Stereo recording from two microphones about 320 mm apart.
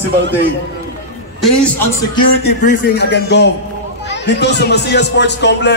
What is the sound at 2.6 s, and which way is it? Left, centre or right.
Speech, left.